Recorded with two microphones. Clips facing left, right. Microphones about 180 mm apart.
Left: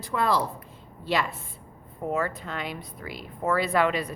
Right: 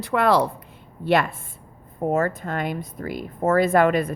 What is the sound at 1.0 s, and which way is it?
Speech, 55° right (ahead or behind).